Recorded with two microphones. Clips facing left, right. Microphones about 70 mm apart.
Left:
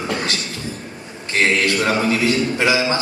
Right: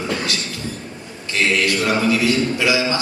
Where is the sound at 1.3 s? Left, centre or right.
Left.